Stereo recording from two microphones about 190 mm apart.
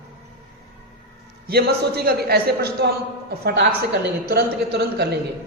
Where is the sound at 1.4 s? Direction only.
55° right (ahead or behind).